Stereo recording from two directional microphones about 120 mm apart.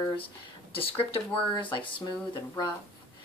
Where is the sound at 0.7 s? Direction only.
50° left (ahead or behind).